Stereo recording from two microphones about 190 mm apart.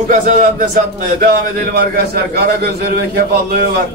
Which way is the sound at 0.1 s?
45° right (ahead or behind).